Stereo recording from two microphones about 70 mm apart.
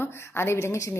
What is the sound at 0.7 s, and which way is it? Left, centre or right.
Speech, left.